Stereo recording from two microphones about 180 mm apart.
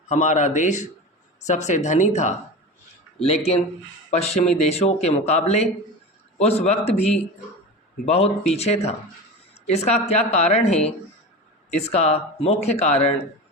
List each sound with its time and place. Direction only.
0.1 s speech: 40° left (ahead or behind)